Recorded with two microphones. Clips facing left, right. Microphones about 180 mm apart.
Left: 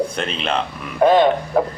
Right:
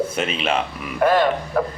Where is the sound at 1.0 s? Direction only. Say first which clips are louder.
Left 4 dB; 20° left (ahead or behind).